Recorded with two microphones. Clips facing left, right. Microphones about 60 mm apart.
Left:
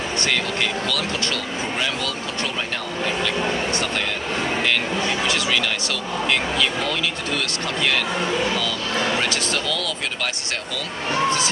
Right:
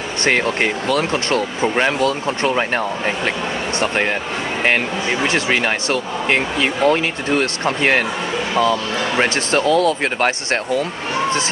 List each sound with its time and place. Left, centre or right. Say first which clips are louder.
0.3 s speech: right 8 dB; right